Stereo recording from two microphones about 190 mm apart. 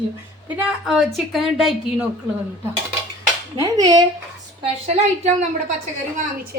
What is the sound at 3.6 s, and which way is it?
Speech, 20° right (ahead or behind).